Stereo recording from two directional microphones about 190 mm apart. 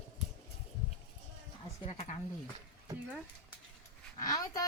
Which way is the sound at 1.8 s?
35° left (ahead or behind).